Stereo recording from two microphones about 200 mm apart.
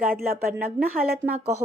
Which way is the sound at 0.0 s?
45° right (ahead or behind).